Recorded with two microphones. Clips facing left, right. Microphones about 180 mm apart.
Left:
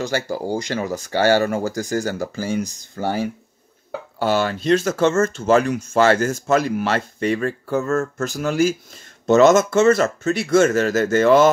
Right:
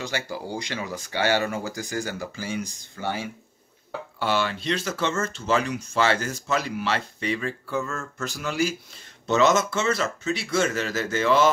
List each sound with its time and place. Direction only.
0.0 s speech: 45° left (ahead or behind)